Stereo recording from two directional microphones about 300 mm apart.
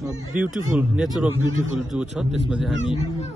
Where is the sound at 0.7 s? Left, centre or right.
Centre.